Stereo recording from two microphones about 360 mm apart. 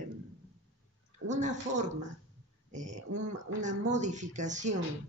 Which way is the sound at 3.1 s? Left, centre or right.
Right.